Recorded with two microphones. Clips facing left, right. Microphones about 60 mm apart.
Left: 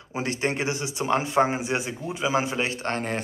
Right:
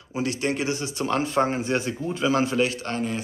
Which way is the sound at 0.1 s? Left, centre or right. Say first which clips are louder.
Right 1 dB; left.